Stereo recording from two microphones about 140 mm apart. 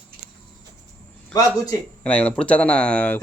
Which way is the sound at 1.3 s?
25° left (ahead or behind).